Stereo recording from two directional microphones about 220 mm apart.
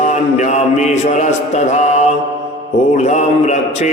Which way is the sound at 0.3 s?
30° left (ahead or behind).